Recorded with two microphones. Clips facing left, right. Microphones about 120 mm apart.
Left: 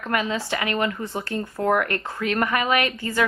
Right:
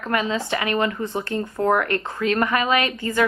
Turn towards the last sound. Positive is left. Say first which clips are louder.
# right 1 dB
turn(degrees=-20)  # may be behind; listen again after turning